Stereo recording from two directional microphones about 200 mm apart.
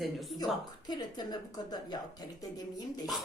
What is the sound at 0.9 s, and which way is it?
Speech, 20° left (ahead or behind).